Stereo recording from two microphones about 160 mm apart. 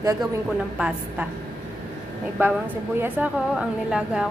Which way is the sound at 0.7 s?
5° right (ahead or behind).